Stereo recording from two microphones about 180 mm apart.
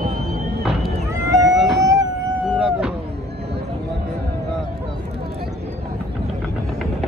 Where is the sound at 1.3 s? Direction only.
20° right (ahead or behind).